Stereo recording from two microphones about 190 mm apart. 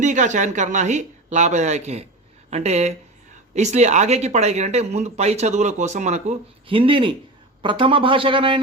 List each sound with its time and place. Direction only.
0.0 s speech: 40° right (ahead or behind)